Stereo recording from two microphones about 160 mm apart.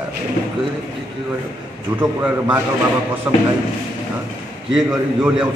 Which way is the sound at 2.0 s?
5° right (ahead or behind).